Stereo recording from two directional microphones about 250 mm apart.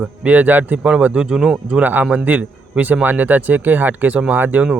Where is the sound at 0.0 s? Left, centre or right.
Centre.